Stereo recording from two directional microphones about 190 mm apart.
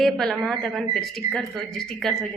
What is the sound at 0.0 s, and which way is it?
Speech, centre (ahead or behind).